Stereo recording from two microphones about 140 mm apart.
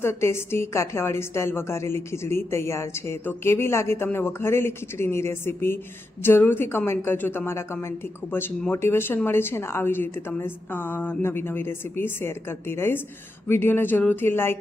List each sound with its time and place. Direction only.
0.0 s a woman's voice: 20° left (ahead or behind)